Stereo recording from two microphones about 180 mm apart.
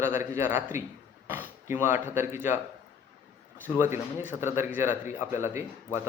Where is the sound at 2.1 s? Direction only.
15° right (ahead or behind).